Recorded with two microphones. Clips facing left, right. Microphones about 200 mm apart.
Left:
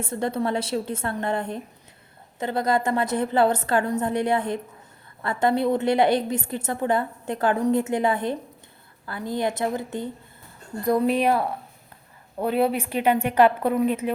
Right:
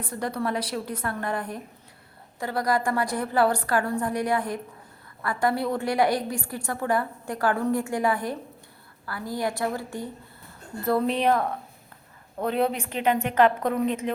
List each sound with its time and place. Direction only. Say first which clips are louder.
0.0 s a woman's voice: left 3 dB; 25° left (ahead or behind); by 14.1 s 5° left (ahead or behind)